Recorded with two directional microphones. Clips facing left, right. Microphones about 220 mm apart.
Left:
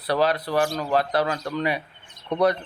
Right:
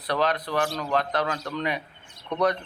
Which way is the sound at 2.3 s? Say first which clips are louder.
Left 3 dB; 35° left (ahead or behind).